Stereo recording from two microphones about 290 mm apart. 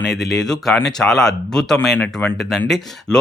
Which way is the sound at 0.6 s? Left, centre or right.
Centre.